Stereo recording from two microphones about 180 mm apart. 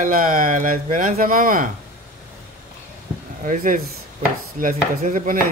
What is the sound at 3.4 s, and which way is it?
Speech, 45° right (ahead or behind).